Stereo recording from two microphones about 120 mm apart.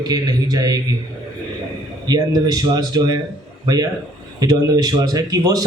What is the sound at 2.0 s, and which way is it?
Speech, 30° right (ahead or behind).